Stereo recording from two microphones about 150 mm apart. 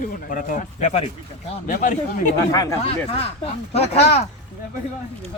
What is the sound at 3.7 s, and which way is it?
Speech, 45° left (ahead or behind).